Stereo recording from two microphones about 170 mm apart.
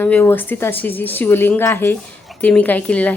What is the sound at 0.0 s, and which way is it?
A woman's voice, 10° left (ahead or behind).